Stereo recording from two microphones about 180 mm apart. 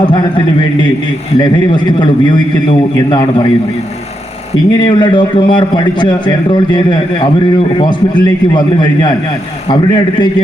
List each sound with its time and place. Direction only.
0.0 s a man's voice: 30° left (ahead or behind)
4.8 s a man's voice: 25° left (ahead or behind)